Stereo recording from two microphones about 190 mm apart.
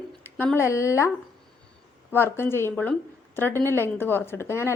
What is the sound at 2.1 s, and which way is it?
A woman's voice, 10° left (ahead or behind).